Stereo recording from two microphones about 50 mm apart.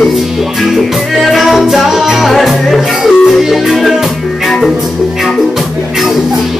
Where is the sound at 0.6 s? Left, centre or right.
Centre.